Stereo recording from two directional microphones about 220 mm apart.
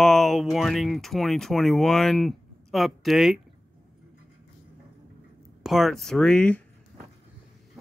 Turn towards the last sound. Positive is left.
turn(degrees=5)  # may be behind; listen again after turning